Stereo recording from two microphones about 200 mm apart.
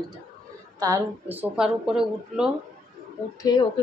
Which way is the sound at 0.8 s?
15° right (ahead or behind).